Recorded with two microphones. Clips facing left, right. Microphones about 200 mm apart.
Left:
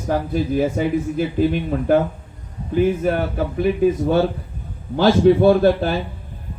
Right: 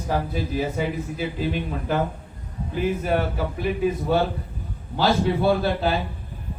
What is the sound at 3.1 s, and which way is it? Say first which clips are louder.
A man's voice: left 3 dB; 55° left (ahead or behind).